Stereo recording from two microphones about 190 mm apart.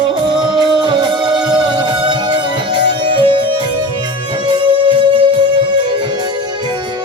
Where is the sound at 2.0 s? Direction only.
25° right (ahead or behind).